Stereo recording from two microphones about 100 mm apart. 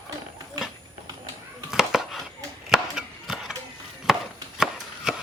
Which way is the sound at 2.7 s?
5° right (ahead or behind).